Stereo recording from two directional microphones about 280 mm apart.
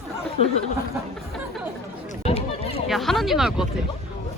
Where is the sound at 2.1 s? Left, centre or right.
Left.